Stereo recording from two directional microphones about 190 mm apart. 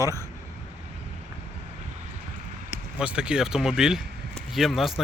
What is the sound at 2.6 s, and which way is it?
Speech, 5° right (ahead or behind).